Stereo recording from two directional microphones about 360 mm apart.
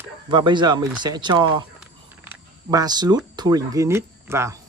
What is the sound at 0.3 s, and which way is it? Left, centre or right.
Speech, centre.